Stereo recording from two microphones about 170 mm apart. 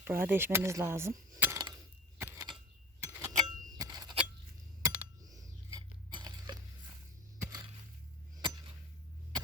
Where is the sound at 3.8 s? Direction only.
20° right (ahead or behind).